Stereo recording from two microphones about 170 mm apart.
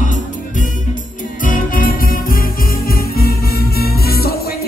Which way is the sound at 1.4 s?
55° left (ahead or behind).